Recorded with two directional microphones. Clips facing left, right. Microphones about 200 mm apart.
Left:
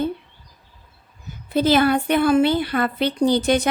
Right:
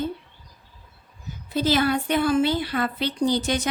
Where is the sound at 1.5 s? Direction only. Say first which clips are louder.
Left 5 dB; 55° left (ahead or behind).